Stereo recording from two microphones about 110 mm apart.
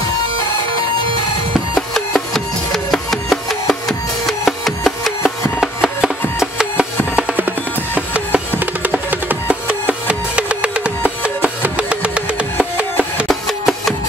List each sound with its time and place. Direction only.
1.8 s music: 5° left (ahead or behind)
13.3 s music: centre (ahead or behind)